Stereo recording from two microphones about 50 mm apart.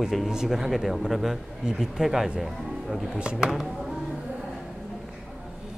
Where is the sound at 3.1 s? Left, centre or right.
Centre.